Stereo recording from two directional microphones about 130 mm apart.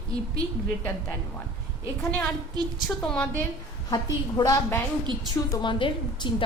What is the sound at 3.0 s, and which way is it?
Speech, 10° left (ahead or behind).